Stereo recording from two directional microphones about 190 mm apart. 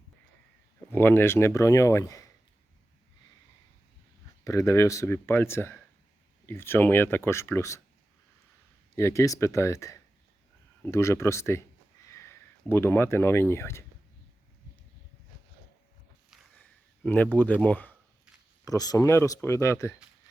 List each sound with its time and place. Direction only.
0.9 s speech: 10° left (ahead or behind)
4.4 s speech: 15° left (ahead or behind)
9.0 s speech: 15° left (ahead or behind)
16.6 s a sound: 10° left (ahead or behind)
17.3 s speech: 10° left (ahead or behind)
18.6 s speech: 20° left (ahead or behind)